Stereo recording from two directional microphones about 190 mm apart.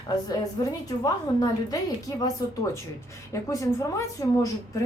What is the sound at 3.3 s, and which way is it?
Speech, 15° left (ahead or behind).